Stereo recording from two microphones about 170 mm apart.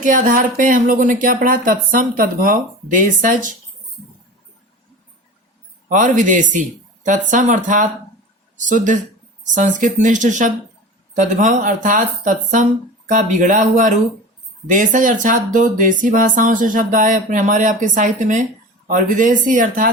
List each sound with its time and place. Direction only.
0.0 s speech: 50° right (ahead or behind)
5.9 s speech: 45° right (ahead or behind)